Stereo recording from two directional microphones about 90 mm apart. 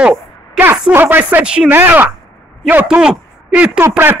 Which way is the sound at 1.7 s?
20° right (ahead or behind).